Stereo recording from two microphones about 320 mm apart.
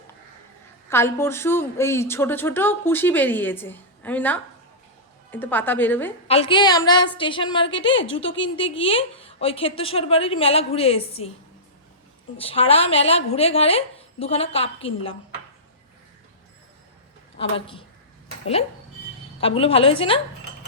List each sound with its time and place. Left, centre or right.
0.9 s a woman's voice: centre
6.2 s a woman's voice: centre
7.9 s a woman's voice: left
8.8 s a woman's voice: centre
12.4 s a woman's voice: centre
17.3 s a woman's voice: centre
19.4 s a woman's voice: centre